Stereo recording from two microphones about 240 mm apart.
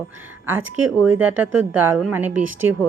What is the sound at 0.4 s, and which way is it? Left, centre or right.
A woman's voice, centre.